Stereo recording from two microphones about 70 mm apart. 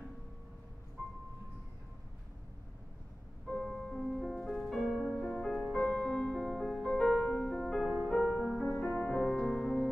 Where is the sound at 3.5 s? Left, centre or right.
Centre.